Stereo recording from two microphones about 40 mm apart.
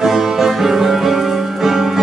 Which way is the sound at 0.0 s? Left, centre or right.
Centre.